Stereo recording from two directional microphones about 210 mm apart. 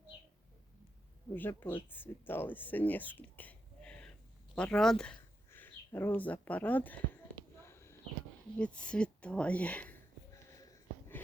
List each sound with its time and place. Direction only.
1.3 s speech: 10° left (ahead or behind)
7.6 s a sound: 10° left (ahead or behind)
8.5 s speech: 5° left (ahead or behind)
10.6 s sniff: 15° left (ahead or behind)